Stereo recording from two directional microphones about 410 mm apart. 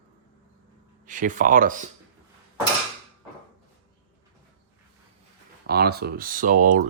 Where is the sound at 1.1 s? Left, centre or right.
Centre.